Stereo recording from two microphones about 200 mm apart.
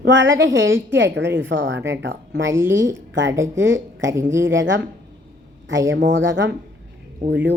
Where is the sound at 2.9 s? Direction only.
70° right (ahead or behind).